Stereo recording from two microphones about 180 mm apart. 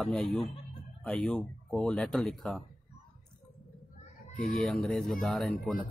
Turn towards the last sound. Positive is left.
turn(degrees=0)  # may be behind; listen again after turning